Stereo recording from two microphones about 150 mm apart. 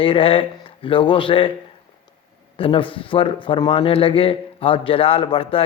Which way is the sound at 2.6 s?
35° left (ahead or behind).